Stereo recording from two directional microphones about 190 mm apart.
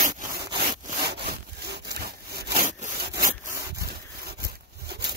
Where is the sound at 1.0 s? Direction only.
55° right (ahead or behind).